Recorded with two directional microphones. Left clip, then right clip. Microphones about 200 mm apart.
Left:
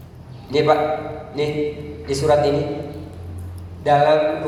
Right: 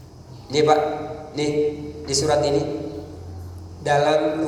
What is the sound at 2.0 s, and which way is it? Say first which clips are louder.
Speech: left 3 dB; 50° right (ahead or behind).